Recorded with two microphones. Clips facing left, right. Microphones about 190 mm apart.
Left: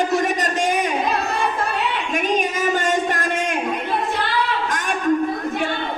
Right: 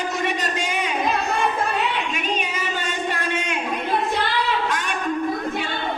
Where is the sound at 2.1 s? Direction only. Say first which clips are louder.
Left 5 dB; 45° left (ahead or behind).